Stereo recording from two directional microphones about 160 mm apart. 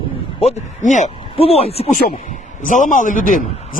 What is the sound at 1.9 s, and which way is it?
A man's voice, 60° left (ahead or behind).